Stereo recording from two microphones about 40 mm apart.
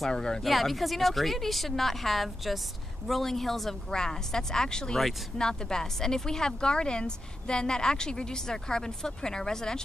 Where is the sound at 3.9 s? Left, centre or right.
Centre.